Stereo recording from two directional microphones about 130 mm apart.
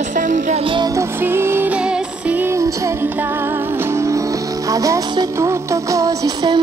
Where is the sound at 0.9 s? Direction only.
15° right (ahead or behind).